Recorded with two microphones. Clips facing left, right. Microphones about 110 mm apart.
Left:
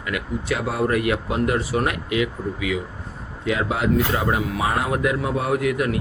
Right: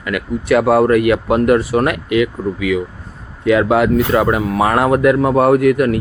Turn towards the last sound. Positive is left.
turn(degrees=-55)  # may be behind; listen again after turning